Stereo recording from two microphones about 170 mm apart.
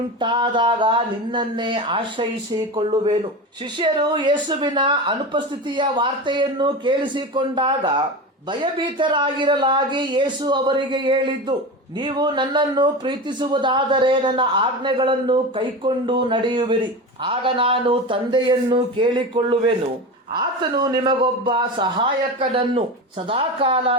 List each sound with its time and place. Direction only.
0.2 s a woman's voice: 30° right (ahead or behind)